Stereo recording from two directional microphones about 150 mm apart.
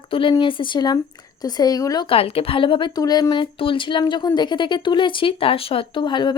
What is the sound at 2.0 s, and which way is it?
A woman's voice, 40° left (ahead or behind).